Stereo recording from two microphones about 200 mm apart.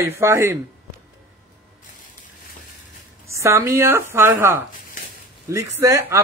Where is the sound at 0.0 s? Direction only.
15° right (ahead or behind).